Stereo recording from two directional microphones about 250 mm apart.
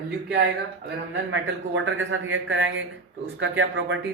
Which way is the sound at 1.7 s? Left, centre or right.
Right.